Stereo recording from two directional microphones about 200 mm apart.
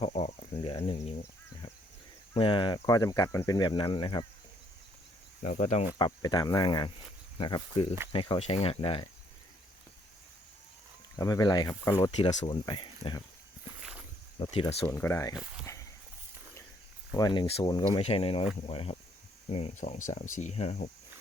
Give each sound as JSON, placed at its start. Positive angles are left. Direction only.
{"t": 0.0, "sound": "speech", "side_deg": 30}
{"t": 2.3, "sound": "speech", "side_deg": 25}
{"t": 5.4, "sound": "speech", "side_deg": 35}
{"t": 5.9, "sound": "speech", "side_deg": 20}
{"t": 11.2, "sound": "speech", "side_deg": 20}
{"t": 14.3, "sound": "speech", "side_deg": 25}
{"t": 14.8, "sound": "speech", "side_deg": 10}
{"t": 15.7, "sound": "a sound", "side_deg": 15}
{"t": 17.2, "sound": "speech", "side_deg": 20}